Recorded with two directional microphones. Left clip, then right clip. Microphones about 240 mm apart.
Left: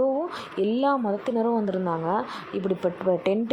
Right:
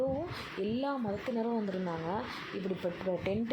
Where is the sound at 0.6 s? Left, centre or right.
Left.